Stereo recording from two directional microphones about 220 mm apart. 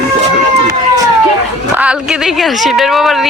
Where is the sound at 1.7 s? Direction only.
5° right (ahead or behind).